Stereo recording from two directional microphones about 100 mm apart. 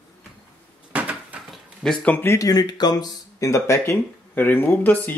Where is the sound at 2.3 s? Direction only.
40° left (ahead or behind).